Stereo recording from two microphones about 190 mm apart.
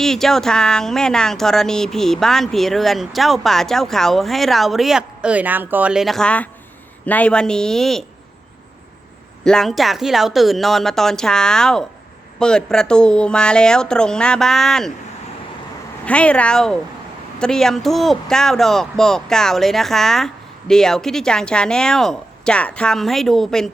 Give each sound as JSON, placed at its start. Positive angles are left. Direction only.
{"t": 0.0, "sound": "speech", "side_deg": 0}
{"t": 9.4, "sound": "speech", "side_deg": 5}
{"t": 16.0, "sound": "speech", "side_deg": 5}